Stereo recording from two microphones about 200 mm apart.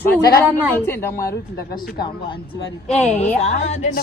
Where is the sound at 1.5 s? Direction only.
50° left (ahead or behind).